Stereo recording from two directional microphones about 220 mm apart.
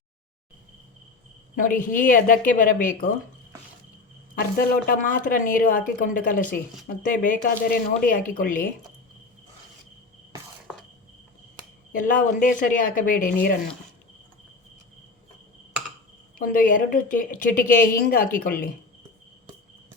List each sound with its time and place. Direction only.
1.5 s a woman's voice: 40° left (ahead or behind)
4.4 s a woman's voice: 40° left (ahead or behind)
11.9 s a woman's voice: 35° left (ahead or behind)
16.4 s a woman's voice: 40° left (ahead or behind)